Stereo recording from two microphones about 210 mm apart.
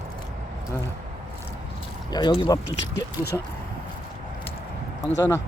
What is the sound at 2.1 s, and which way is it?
Speech, 20° left (ahead or behind).